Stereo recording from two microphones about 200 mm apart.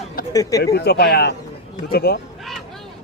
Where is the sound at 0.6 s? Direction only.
50° left (ahead or behind).